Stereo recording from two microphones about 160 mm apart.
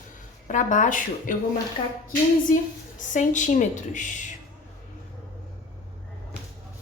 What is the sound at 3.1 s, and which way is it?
A woman's voice, 50° left (ahead or behind).